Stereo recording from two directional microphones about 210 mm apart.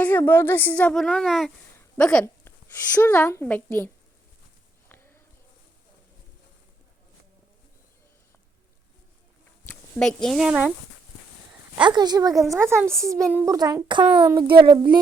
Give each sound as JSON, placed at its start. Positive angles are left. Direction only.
{"t": 0.0, "sound": "a woman's voice", "side_deg": 10}
{"t": 9.6, "sound": "speech", "side_deg": 5}
{"t": 11.8, "sound": "a woman's voice", "side_deg": -20}